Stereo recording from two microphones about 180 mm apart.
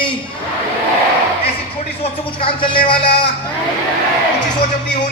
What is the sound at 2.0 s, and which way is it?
Speech, 30° left (ahead or behind).